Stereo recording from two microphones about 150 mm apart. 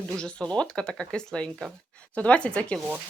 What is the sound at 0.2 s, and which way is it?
Speech, 5° left (ahead or behind).